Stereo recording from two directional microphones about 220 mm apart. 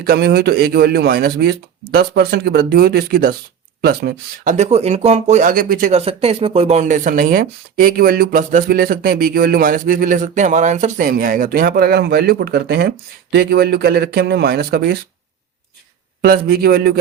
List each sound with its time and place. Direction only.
0.0 s speech: 45° right (ahead or behind)
4.5 s speech: 30° right (ahead or behind); by 14.9 s 45° right (ahead or behind)
16.2 s speech: 45° right (ahead or behind)